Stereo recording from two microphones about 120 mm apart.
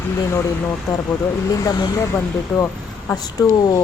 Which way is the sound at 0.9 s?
30° left (ahead or behind).